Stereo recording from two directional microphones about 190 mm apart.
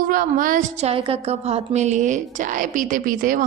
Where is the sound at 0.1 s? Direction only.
45° right (ahead or behind).